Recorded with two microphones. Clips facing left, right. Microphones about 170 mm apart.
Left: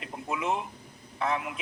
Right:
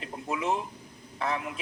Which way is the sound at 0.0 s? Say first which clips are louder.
Right 1 dB; 35° right (ahead or behind).